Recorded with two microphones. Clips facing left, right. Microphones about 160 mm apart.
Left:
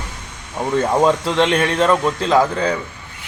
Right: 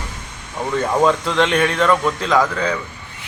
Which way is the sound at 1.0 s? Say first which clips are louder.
Left 1 dB; 30° left (ahead or behind).